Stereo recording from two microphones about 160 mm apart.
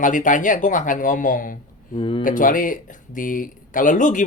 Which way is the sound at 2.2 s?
55° left (ahead or behind).